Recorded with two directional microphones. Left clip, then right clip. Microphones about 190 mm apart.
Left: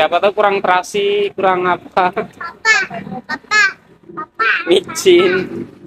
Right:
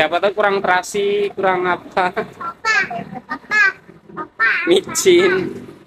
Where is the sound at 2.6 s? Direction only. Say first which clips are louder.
Left 4 dB; 35° left (ahead or behind).